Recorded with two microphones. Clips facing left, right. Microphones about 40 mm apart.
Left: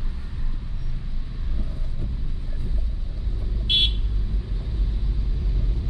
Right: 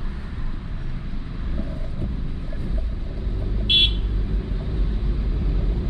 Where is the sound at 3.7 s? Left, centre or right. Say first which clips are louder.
Right 3 dB; right.